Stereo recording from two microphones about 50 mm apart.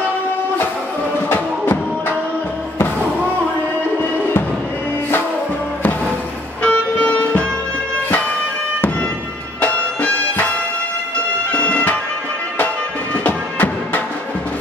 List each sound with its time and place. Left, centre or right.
1.3 s music: left
6.6 s music: left
9.6 s bagpipes: left
11.5 s bagpipes: left
13.1 s music: left